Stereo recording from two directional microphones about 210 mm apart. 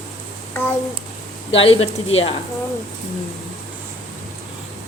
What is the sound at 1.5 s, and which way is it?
Speech, 30° left (ahead or behind).